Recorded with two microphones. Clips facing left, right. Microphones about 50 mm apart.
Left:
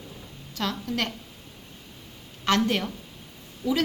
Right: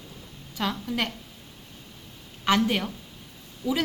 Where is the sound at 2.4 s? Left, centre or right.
Centre.